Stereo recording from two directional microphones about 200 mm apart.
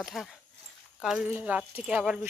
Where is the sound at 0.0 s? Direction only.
Centre (ahead or behind).